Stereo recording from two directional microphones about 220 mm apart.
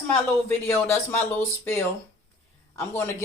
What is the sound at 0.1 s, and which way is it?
Speech, 10° left (ahead or behind).